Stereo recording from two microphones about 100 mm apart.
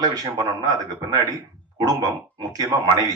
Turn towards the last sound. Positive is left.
turn(degrees=-40)  # may be behind; listen again after turning